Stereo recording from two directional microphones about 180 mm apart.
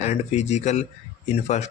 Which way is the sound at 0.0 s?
40° left (ahead or behind).